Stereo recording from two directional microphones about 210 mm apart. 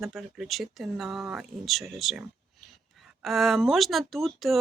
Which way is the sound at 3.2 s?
Centre (ahead or behind).